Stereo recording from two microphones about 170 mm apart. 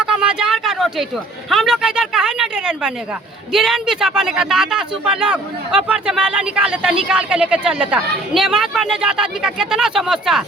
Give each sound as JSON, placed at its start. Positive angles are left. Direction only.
{"t": 0.0, "sound": "speech", "side_deg": -5}